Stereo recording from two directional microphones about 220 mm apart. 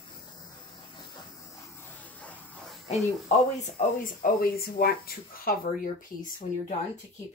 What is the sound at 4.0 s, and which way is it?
Speech, 40° left (ahead or behind).